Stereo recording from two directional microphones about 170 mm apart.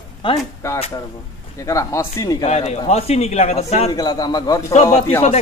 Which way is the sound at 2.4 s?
40° left (ahead or behind).